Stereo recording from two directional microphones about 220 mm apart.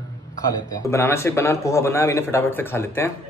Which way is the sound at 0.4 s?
15° left (ahead or behind).